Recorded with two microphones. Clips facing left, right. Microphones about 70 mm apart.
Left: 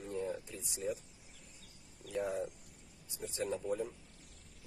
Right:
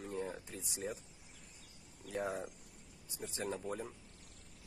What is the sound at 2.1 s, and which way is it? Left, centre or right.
Speech, right.